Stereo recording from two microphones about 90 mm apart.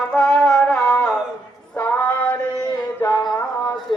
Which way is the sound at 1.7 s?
15° left (ahead or behind).